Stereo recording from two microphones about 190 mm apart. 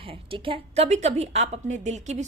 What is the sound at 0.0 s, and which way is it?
A woman's voice, 30° right (ahead or behind).